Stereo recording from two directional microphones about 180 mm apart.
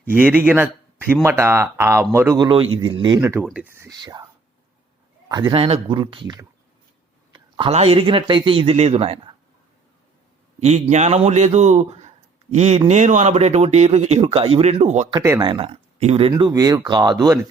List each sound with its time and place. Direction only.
0.1 s speech: 10° right (ahead or behind); by 3.2 s 25° right (ahead or behind)
3.2 s speech: 15° right (ahead or behind)
3.8 s speech: 25° right (ahead or behind)
5.3 s speech: 25° right (ahead or behind)
10.6 s speech: 40° right (ahead or behind)
15.1 s speech: 20° right (ahead or behind); by 16.3 s 35° right (ahead or behind)
16.3 s speech: 20° right (ahead or behind)